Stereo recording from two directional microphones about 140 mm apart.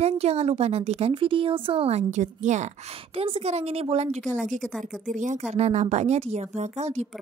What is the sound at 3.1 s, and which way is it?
Speech, 40° right (ahead or behind).